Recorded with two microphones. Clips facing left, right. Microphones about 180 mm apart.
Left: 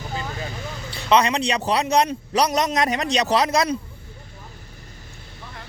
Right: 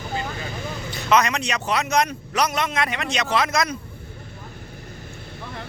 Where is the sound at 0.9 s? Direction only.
30° left (ahead or behind).